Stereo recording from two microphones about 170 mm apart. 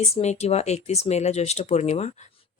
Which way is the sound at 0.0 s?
40° left (ahead or behind).